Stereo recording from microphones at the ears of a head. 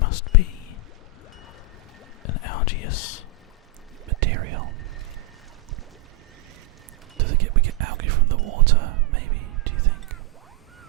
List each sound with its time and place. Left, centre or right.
0.0 s whispering: left
2.2 s whispering: left
4.1 s whispering: right
7.2 s a sound: right